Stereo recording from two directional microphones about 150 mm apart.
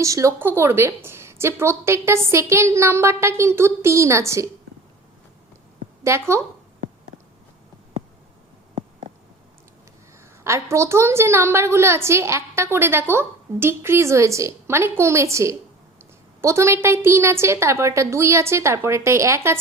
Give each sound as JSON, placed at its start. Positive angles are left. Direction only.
{"t": 0.0, "sound": "a woman's voice", "side_deg": -20}
{"t": 6.0, "sound": "a woman's voice", "side_deg": -20}
{"t": 10.4, "sound": "a woman's voice", "side_deg": -20}